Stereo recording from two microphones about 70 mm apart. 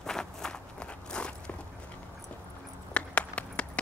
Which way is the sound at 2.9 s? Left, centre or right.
Centre.